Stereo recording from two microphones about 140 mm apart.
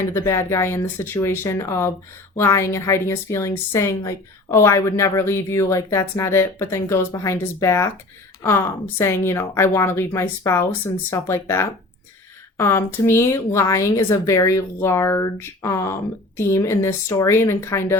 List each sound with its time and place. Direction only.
0.1 s a woman's voice: 20° left (ahead or behind)